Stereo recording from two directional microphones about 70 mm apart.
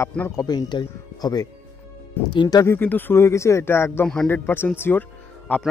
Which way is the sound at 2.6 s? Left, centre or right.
Left.